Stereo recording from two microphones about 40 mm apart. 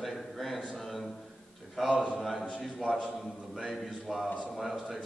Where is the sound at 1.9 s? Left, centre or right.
Right.